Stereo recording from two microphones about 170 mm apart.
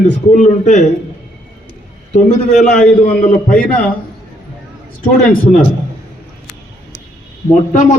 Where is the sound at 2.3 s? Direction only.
45° left (ahead or behind).